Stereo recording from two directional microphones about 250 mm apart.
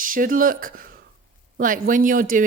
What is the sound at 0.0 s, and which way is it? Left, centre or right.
Speech, right.